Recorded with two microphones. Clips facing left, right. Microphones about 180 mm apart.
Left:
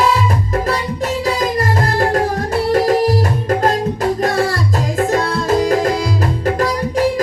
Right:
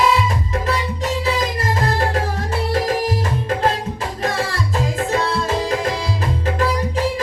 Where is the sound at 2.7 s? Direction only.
40° left (ahead or behind).